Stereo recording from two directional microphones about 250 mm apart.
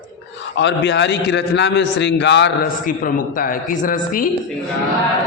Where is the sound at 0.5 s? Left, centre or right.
Left.